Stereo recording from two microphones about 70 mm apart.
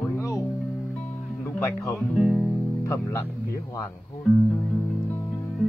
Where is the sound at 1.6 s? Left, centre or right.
Left.